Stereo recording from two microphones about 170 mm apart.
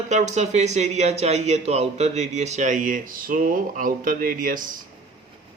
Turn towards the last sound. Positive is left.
turn(degrees=-55)  # may be behind; listen again after turning